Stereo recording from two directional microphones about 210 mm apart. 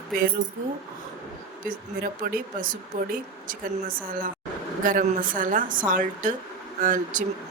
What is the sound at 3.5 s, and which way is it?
A woman's voice, 40° right (ahead or behind).